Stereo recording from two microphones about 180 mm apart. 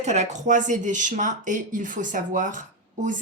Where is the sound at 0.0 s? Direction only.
40° right (ahead or behind).